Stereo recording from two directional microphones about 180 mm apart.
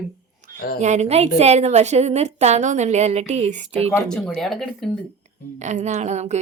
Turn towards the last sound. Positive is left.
turn(degrees=-40)  # may be behind; listen again after turning